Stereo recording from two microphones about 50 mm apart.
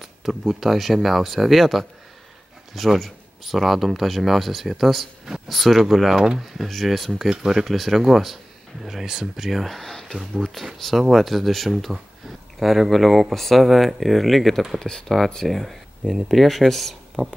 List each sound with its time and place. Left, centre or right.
0.0 s speech: centre
3.0 s speech: centre
6.7 s speech: centre
11.7 s speech: centre
14.8 s speech: centre
17.2 s speech: right